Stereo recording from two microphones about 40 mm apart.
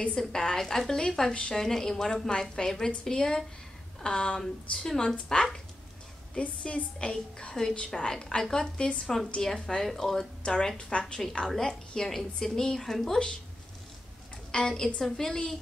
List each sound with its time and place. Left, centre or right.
0.2 s a woman's voice: centre
4.4 s a woman's voice: centre
5.0 s a woman's voice: left
6.6 s a woman's voice: left
9.0 s a woman's voice: centre
10.4 s a woman's voice: left
14.5 s a woman's voice: centre